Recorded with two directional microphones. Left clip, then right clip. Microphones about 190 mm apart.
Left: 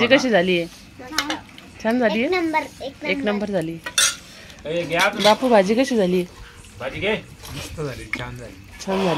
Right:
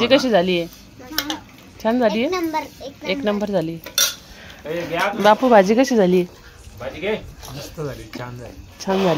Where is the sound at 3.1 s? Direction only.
5° right (ahead or behind).